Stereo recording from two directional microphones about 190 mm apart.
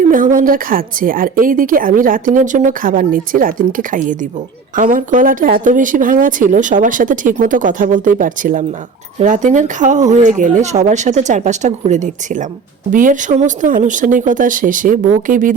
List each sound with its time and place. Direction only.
0.0 s a woman's voice: 45° right (ahead or behind)